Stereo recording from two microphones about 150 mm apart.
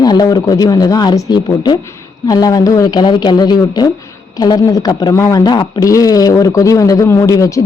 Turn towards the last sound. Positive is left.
turn(degrees=20)  # may be behind; listen again after turning